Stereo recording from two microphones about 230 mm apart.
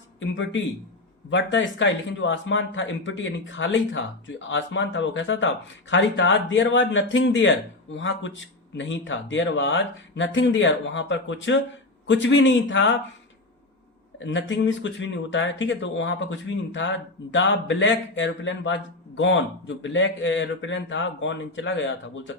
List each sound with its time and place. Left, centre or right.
0.2 s a man's voice: left
14.2 s speech: left